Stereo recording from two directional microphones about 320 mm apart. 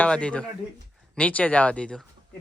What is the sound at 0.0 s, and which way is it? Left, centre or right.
Speech, centre.